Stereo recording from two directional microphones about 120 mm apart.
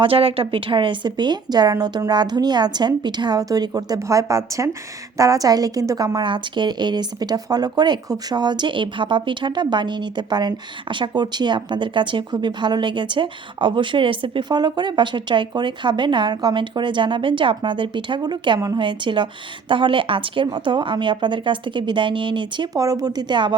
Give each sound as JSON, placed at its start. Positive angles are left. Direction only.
{"t": 0.0, "sound": "a woman's voice", "side_deg": -50}
{"t": 22.8, "sound": "a woman's voice", "side_deg": -30}